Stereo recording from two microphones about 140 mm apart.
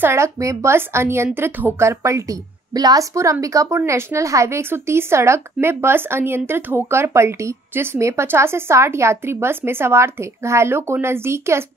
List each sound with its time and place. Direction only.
0.0 s a woman's voice: 20° right (ahead or behind)